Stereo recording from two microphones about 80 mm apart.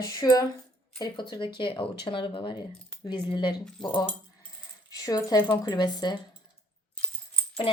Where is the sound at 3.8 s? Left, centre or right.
Left.